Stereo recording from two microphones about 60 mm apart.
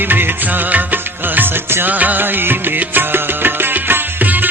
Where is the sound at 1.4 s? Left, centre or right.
Right.